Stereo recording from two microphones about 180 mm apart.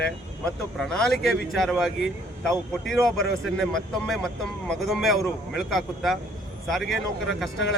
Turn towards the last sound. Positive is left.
turn(degrees=0)  # may be behind; listen again after turning